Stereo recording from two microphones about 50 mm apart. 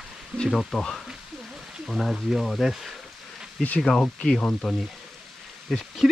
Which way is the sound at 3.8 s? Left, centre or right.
Centre.